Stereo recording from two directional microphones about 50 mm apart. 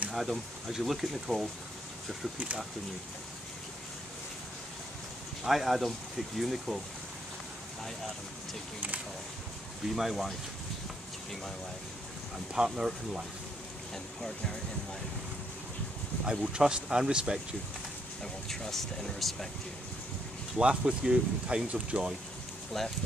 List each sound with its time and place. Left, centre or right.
0.1 s speech: centre
5.4 s speech: centre
9.9 s speech: centre
12.5 s speech: centre
14.2 s speech: centre
16.3 s speech: centre
18.2 s speech: centre
20.5 s speech: centre
22.7 s speech: centre